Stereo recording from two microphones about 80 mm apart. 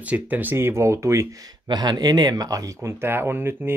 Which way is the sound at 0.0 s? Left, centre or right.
Centre.